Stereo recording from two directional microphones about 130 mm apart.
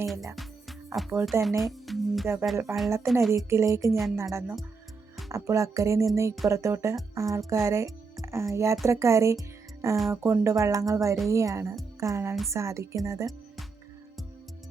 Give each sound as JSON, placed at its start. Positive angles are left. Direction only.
{"t": 0.0, "sound": "music", "side_deg": 0}
{"t": 1.2, "sound": "speech", "side_deg": 0}
{"t": 2.2, "sound": "speech", "side_deg": -20}
{"t": 3.1, "sound": "music", "side_deg": 0}
{"t": 3.3, "sound": "speech", "side_deg": -25}
{"t": 11.9, "sound": "music", "side_deg": -20}
{"t": 12.5, "sound": "speech", "side_deg": -20}